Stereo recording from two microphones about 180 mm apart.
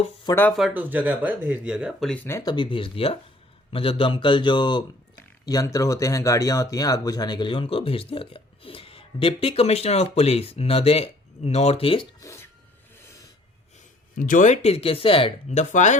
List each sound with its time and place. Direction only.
0.3 s speech: 10° left (ahead or behind)
0.6 s speech: 10° right (ahead or behind); by 12.0 s 30° left (ahead or behind)
12.2 s a sound: 15° left (ahead or behind)
14.2 s speech: 45° left (ahead or behind)